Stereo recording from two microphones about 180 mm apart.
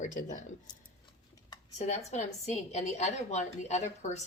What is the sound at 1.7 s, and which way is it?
A woman's voice, 40° left (ahead or behind).